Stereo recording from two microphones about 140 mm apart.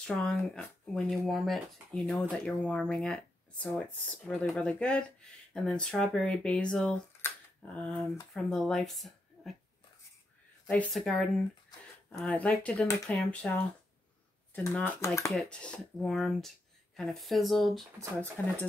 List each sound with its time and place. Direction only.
0.0 s speech: 5° left (ahead or behind)
7.2 s a sound: 15° left (ahead or behind)
8.3 s speech: centre (ahead or behind)
10.7 s speech: 5° left (ahead or behind)
14.5 s speech: 15° left (ahead or behind)
15.3 s speech: 10° left (ahead or behind)
18.4 s speech: 10° left (ahead or behind)